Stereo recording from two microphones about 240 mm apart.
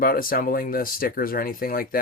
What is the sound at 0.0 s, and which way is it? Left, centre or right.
Speech, left.